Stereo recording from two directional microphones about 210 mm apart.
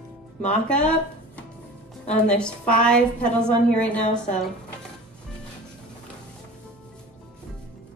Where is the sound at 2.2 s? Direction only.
5° left (ahead or behind).